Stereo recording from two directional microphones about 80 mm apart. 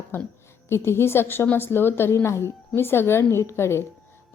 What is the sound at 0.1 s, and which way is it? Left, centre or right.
A woman's voice, left.